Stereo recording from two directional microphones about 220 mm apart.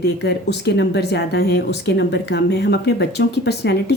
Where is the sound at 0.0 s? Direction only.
50° left (ahead or behind).